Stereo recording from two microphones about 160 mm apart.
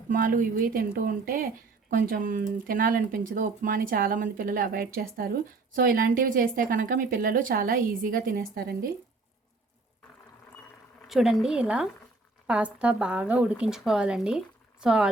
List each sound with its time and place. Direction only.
0.1 s speech: 60° right (ahead or behind)
11.0 s speech: centre (ahead or behind)